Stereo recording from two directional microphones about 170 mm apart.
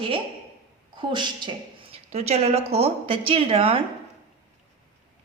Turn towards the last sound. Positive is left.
turn(degrees=-35)  # may be behind; listen again after turning